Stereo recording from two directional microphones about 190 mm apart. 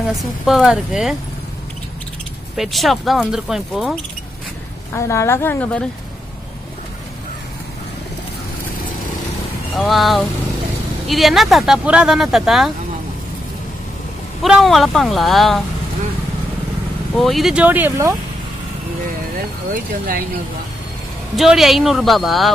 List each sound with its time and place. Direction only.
0.1 s speech: centre (ahead or behind)
2.5 s speech: centre (ahead or behind)
4.9 s a woman's voice: 15° left (ahead or behind)
9.8 s speech: centre (ahead or behind)
14.4 s speech: centre (ahead or behind)
17.2 s speech: centre (ahead or behind)
19.7 s speech: 50° right (ahead or behind)
21.4 s speech: centre (ahead or behind)